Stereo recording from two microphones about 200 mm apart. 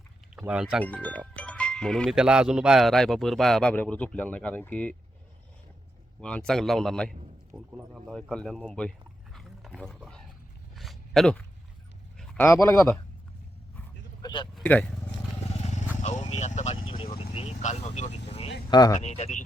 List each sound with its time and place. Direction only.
0.3 s speech: 5° right (ahead or behind)
0.9 s speech: 5° left (ahead or behind)
6.1 s speech: 5° left (ahead or behind)
9.3 s a sound: centre (ahead or behind)
9.9 s speech: 5° left (ahead or behind)
10.8 s a sound: centre (ahead or behind)
12.5 s speech: 15° left (ahead or behind)
14.2 s a sound: 20° left (ahead or behind)
14.5 s speech: 5° left (ahead or behind)
15.6 s vehicle: 35° left (ahead or behind)
18.3 s a sound: 30° left (ahead or behind)
18.7 s speech: 20° left (ahead or behind)
18.9 s speech: 35° left (ahead or behind)